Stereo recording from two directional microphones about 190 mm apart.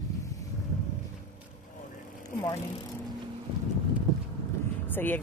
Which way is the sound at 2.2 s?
20° left (ahead or behind).